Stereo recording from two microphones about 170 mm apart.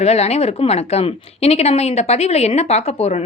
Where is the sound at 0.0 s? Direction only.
40° left (ahead or behind).